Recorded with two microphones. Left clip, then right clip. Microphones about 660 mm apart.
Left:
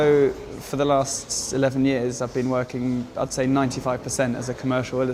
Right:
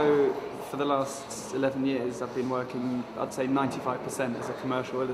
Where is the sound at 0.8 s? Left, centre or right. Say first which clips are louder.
Left 7 dB; left.